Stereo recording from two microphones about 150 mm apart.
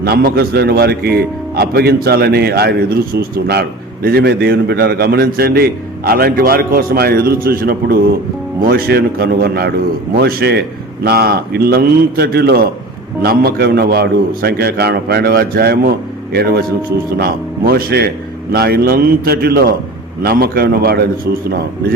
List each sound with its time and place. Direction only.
0.0 s a man's voice: 90° right